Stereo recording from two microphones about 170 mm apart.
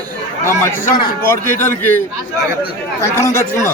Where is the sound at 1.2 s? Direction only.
15° left (ahead or behind).